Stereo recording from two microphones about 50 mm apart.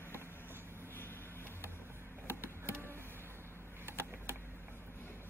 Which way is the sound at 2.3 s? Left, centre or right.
Right.